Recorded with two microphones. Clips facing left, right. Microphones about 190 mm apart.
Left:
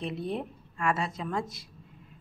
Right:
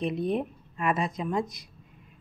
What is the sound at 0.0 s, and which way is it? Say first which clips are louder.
Speech: right 5 dB; 15° right (ahead or behind).